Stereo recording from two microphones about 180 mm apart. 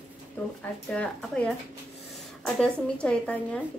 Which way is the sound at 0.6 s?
5° left (ahead or behind).